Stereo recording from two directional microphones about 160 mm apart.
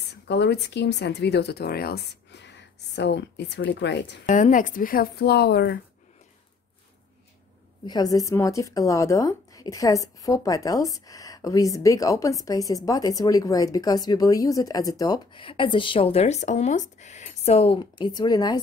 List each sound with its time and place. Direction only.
0.3 s speech: 90° left
4.3 s speech: 55° left (ahead or behind); by 5.8 s 90° left
7.8 s a woman's voice: 25° left (ahead or behind)